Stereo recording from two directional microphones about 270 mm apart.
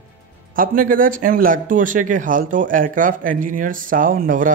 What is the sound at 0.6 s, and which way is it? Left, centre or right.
A man's voice, right.